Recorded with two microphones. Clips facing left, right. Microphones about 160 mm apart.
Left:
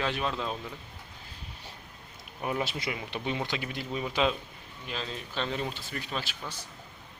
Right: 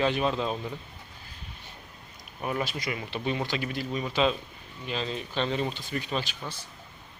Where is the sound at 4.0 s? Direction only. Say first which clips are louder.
Right 2 dB; 5° left (ahead or behind).